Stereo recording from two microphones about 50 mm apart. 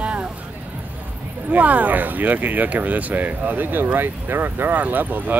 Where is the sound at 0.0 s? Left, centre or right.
Right.